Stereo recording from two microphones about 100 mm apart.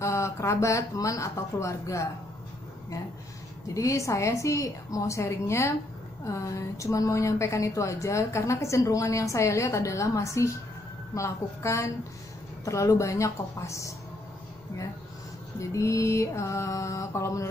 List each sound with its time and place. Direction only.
0.0 s a woman's voice: 30° left (ahead or behind)
3.6 s a woman's voice: 30° left (ahead or behind)
15.7 s a woman's voice: 30° left (ahead or behind)